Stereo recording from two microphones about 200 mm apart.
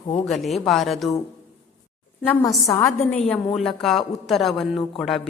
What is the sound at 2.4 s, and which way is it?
Speech, 20° left (ahead or behind).